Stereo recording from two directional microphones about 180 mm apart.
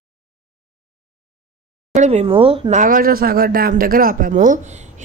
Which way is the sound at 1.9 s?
40° right (ahead or behind).